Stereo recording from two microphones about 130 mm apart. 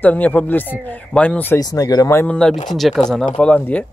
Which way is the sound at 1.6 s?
30° left (ahead or behind).